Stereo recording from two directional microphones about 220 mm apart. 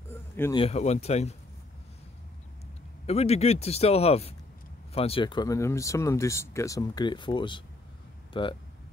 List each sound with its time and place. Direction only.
0.1 s a sound: 10° left (ahead or behind)
0.6 s speech: 30° left (ahead or behind)
3.1 s speech: 30° left (ahead or behind)